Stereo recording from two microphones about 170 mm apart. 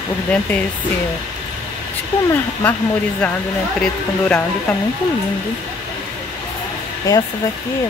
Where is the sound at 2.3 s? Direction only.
15° left (ahead or behind).